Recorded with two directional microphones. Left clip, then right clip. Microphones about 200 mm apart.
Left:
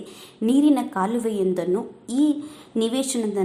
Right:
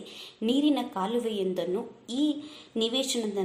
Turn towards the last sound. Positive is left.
turn(degrees=10)  # may be behind; listen again after turning